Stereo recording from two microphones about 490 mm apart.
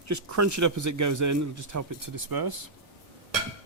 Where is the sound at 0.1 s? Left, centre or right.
Right.